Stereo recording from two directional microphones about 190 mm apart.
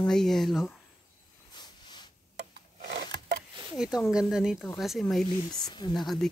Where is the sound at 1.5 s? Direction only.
20° left (ahead or behind).